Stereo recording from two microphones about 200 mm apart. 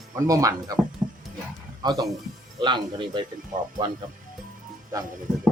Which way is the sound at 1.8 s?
20° right (ahead or behind).